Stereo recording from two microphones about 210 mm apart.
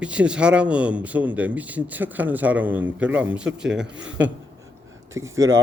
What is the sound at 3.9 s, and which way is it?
Speech, 60° right (ahead or behind).